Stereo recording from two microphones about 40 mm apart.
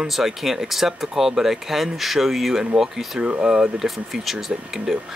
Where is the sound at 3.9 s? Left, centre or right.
Centre.